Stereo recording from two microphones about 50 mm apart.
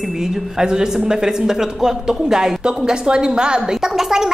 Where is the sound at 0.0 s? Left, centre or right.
Centre.